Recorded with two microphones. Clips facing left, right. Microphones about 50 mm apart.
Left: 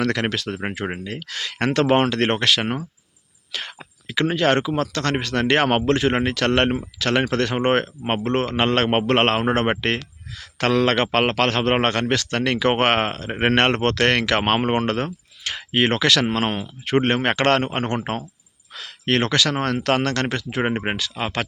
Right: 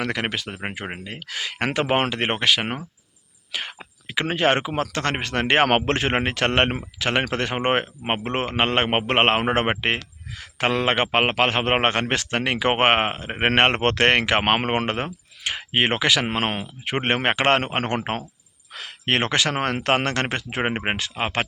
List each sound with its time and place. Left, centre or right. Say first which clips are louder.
0.0 s speech: left 3 dB; centre
3.5 s a sound: right 1 dB; centre
4.3 s a man's voice: left 1 dB; right
5.6 s a man's voice: left 2 dB; right; by 16.2 s centre
16.2 s a man's voice: left 2 dB; right